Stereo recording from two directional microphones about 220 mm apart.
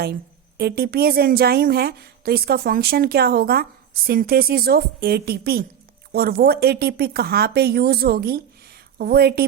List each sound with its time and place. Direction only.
0.0 s a woman's voice: 45° right (ahead or behind)